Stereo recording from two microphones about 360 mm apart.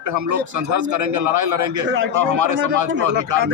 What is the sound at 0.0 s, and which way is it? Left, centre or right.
Speech, right.